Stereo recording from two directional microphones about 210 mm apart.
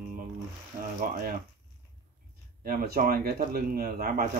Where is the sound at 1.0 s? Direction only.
40° right (ahead or behind).